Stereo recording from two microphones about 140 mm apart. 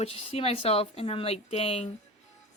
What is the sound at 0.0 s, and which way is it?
A woman's voice, 40° left (ahead or behind).